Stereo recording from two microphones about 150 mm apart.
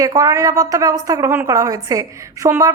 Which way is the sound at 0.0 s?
20° right (ahead or behind).